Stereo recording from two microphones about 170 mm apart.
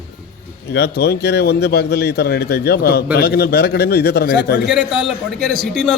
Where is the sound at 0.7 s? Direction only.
75° left (ahead or behind).